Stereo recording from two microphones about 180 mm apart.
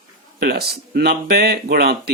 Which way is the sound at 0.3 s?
60° right (ahead or behind).